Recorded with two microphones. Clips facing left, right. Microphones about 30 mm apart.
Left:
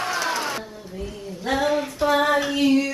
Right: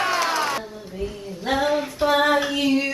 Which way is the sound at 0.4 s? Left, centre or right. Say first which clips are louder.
Right 3 dB; centre.